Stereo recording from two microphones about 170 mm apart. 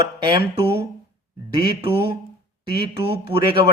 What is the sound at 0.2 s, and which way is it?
Speech, 30° right (ahead or behind).